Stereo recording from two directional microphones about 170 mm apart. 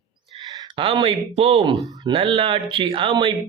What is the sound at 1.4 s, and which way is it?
Speech, 35° right (ahead or behind).